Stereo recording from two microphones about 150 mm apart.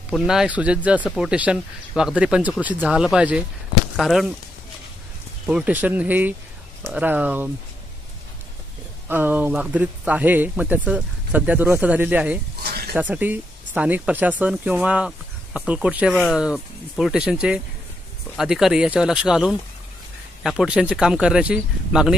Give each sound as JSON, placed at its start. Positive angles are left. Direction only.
{"t": 0.1, "sound": "speech", "side_deg": -5}
{"t": 5.5, "sound": "speech", "side_deg": -10}
{"t": 9.1, "sound": "speech", "side_deg": -15}
{"t": 12.6, "sound": "snake", "side_deg": -90}
{"t": 12.9, "sound": "speech", "side_deg": -10}